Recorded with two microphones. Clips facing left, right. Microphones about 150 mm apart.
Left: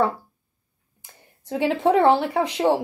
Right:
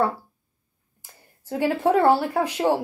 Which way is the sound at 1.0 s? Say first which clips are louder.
Left 2 dB; 5° right (ahead or behind).